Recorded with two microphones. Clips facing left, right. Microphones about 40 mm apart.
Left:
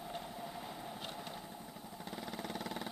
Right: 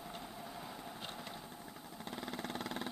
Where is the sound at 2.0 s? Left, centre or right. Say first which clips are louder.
Right 1 dB; right.